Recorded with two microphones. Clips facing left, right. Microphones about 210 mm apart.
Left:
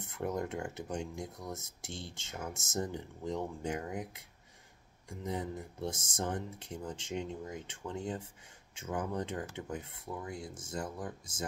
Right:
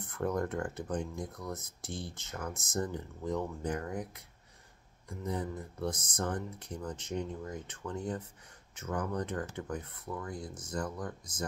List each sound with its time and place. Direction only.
0.0 s speech: 20° left (ahead or behind)